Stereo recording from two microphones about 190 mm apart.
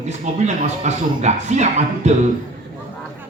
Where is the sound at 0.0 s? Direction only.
35° right (ahead or behind).